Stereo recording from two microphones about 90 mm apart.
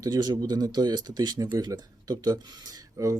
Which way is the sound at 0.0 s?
45° right (ahead or behind).